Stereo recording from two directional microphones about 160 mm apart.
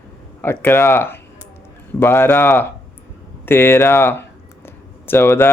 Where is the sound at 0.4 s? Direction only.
10° left (ahead or behind).